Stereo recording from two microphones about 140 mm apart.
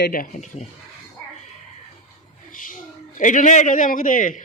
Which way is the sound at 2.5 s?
75° left (ahead or behind).